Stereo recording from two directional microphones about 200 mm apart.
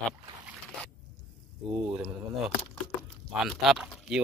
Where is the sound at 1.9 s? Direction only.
5° right (ahead or behind).